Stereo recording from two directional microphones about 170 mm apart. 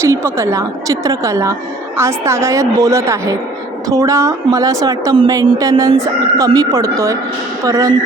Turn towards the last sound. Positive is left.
turn(degrees=-20)  # may be behind; listen again after turning